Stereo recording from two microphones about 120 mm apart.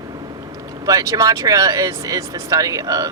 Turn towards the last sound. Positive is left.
turn(degrees=-30)  # may be behind; listen again after turning